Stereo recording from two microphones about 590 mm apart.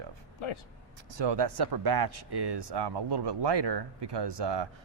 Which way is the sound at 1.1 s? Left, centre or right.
Right.